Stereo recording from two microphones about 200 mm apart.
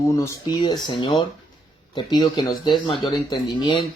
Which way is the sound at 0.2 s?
20° left (ahead or behind).